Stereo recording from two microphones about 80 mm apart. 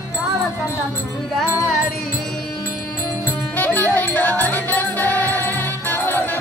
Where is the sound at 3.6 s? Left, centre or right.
Left.